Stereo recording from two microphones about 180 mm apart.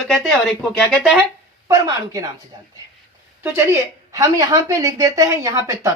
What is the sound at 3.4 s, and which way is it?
A woman's voice, 15° right (ahead or behind).